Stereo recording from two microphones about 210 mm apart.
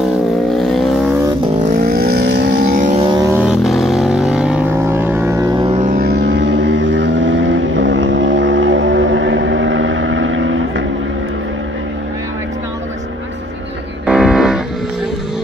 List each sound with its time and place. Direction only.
0.6 s vehicle: centre (ahead or behind)
2.7 s a sound: 35° right (ahead or behind)
3.1 s vehicle: 15° right (ahead or behind)
5.9 s vehicle: 45° right (ahead or behind); by 10.9 s 65° right (ahead or behind)
14.0 s music: 5° right (ahead or behind)